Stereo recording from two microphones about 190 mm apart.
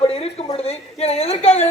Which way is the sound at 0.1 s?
30° left (ahead or behind).